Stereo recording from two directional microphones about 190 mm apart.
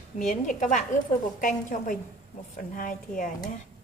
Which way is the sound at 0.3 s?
40° left (ahead or behind).